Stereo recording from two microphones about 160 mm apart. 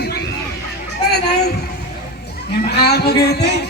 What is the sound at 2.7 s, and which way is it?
Music, 90° left.